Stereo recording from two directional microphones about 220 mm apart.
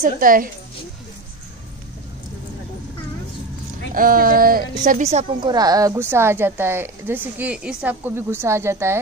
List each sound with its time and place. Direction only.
0.2 s speech: 40° right (ahead or behind)
3.9 s a woman's voice: 40° right (ahead or behind)
5.5 s speech: 15° right (ahead or behind)